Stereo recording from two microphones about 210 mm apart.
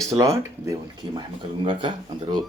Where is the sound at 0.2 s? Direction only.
15° right (ahead or behind).